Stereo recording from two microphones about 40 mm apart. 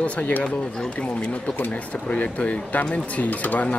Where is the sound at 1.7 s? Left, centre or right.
Left.